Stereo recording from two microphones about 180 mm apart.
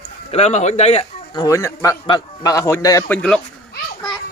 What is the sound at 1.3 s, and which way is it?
A man's voice, 20° left (ahead or behind).